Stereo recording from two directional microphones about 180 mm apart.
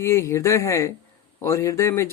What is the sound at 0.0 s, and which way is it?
Speech, 15° left (ahead or behind).